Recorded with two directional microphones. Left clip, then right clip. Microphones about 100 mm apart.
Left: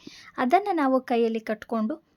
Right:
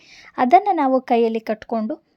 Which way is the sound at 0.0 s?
35° right (ahead or behind).